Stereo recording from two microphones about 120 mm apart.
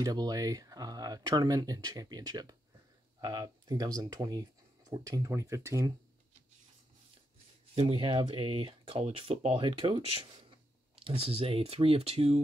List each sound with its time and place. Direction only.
0.0 s speech: 30° right (ahead or behind)
7.7 s speech: 50° right (ahead or behind)